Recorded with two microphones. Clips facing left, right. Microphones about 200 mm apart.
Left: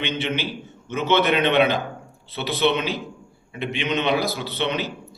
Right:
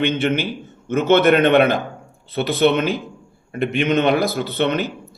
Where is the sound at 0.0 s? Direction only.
50° right (ahead or behind).